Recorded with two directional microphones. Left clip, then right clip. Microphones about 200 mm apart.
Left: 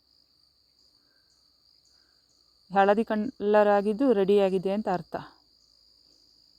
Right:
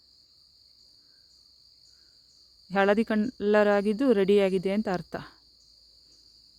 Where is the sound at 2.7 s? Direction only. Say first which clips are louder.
Left 2 dB; 5° right (ahead or behind).